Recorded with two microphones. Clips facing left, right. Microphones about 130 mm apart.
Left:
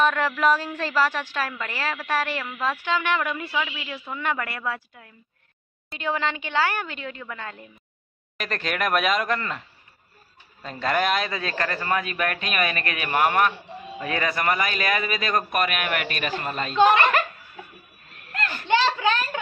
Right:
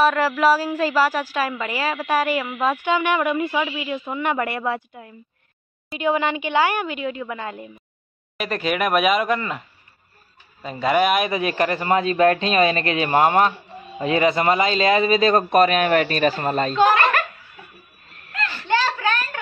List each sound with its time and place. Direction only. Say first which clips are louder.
0.0 s a woman's voice: right 4 dB; 5° right (ahead or behind)
10.6 s a man's voice: right 5 dB; 10° right (ahead or behind); by 16.7 s 40° right (ahead or behind)
16.9 s speech: right 1 dB; 20° left (ahead or behind)
18.3 s children playing: right 1 dB; 45° left (ahead or behind)
18.7 s a sound: even; 20° left (ahead or behind)